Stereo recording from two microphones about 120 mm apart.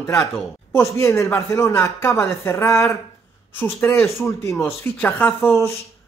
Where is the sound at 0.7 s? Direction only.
20° left (ahead or behind).